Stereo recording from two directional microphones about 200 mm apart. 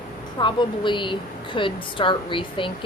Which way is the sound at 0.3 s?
25° left (ahead or behind).